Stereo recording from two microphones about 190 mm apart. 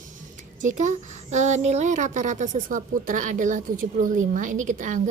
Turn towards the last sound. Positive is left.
turn(degrees=-40)  # may be behind; listen again after turning